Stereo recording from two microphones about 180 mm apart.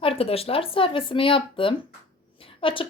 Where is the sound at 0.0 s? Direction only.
30° left (ahead or behind).